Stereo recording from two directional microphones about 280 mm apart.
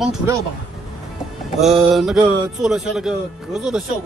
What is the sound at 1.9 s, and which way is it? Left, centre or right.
Speech, centre.